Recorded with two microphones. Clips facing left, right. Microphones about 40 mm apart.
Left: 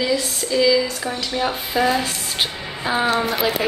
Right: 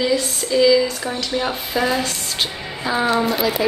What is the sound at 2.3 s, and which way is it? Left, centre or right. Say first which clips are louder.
Speech: even; centre.